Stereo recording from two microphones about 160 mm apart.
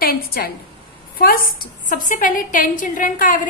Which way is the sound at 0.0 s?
70° left (ahead or behind).